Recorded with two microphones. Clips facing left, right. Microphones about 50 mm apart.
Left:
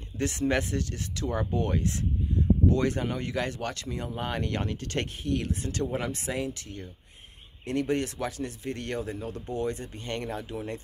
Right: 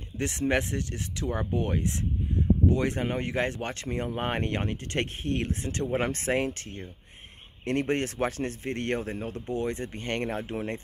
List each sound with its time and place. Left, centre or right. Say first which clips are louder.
0.2 s speech: even; right
6.0 s speech: right 4 dB; right